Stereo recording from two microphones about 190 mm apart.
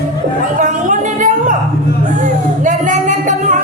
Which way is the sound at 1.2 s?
40° right (ahead or behind).